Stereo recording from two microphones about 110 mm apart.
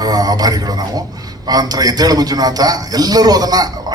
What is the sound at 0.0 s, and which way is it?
A man's voice, 35° right (ahead or behind).